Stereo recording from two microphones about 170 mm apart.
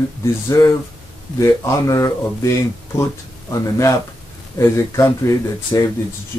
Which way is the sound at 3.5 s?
20° left (ahead or behind).